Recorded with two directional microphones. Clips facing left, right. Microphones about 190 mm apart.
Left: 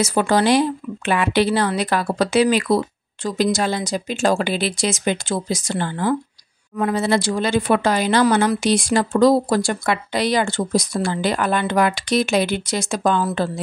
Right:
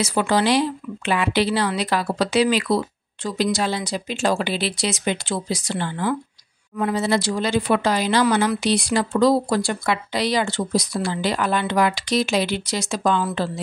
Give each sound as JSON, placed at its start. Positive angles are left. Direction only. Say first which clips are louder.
{"t": 0.0, "sound": "speech", "louder": "left 2 dB", "side_deg": 45}